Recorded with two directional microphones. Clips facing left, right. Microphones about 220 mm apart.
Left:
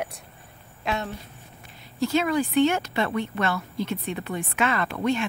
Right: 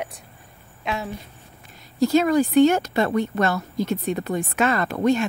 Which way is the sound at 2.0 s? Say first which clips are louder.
Right 5 dB; 40° right (ahead or behind).